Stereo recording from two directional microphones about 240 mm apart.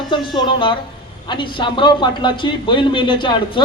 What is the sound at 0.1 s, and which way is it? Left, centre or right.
A man's voice, centre.